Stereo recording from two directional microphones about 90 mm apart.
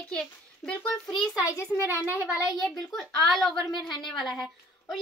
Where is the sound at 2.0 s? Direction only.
15° right (ahead or behind).